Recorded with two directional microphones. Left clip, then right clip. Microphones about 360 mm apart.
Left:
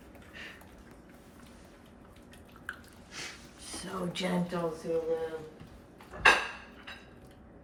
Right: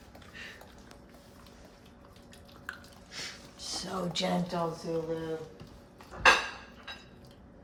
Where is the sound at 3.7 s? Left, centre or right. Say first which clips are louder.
Right 3 dB; centre.